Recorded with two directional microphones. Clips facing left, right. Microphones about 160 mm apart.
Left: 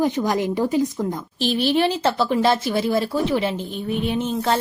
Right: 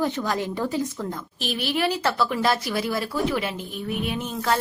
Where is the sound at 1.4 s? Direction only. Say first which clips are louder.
Left 6 dB; 30° left (ahead or behind).